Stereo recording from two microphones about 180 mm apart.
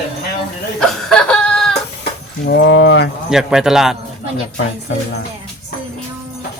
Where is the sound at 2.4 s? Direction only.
75° left (ahead or behind).